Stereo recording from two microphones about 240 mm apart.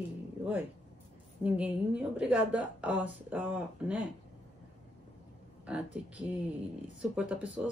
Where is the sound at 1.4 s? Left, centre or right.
Centre.